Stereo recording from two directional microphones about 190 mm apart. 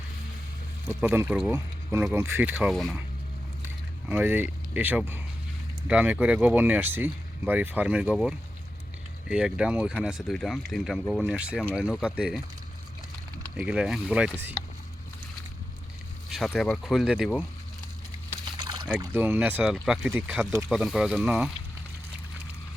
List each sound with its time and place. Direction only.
0.9 s speech: 10° right (ahead or behind)
4.1 s speech: 10° right (ahead or behind)
13.6 s speech: 5° right (ahead or behind)
16.5 s speech: centre (ahead or behind)
18.5 s a sound: 20° right (ahead or behind)
18.9 s speech: 5° right (ahead or behind)